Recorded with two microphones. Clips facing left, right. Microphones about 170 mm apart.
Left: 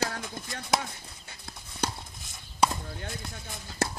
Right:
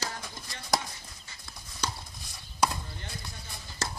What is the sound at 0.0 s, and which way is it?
Chop, 60° left (ahead or behind).